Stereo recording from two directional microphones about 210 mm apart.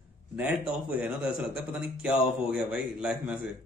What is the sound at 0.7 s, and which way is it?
A man's voice, 5° right (ahead or behind).